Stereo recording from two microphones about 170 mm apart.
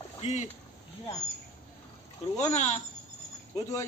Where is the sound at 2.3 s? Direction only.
40° left (ahead or behind).